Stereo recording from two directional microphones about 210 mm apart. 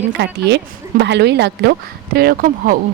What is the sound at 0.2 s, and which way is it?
A woman's voice, 55° right (ahead or behind).